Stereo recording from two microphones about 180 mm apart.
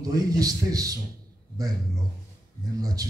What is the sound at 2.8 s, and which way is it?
Speech, 20° right (ahead or behind).